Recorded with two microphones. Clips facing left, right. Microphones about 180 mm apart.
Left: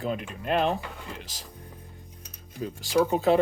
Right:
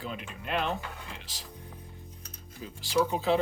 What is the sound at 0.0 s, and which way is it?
Speech, 45° left (ahead or behind).